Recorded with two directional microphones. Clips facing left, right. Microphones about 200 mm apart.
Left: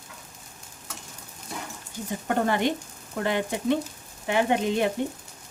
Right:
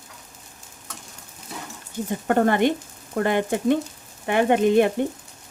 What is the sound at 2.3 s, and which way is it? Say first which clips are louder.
Speech: right 5 dB; 55° right (ahead or behind).